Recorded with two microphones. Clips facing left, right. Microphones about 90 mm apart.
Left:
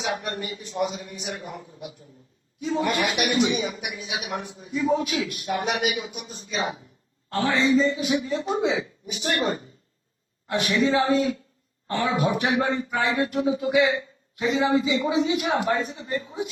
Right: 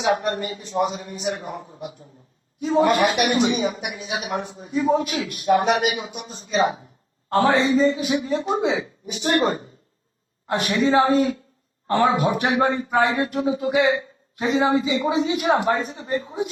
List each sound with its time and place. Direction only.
0.0 s speech: 35° right (ahead or behind)